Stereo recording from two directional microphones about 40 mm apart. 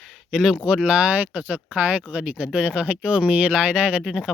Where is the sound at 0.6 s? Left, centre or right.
Right.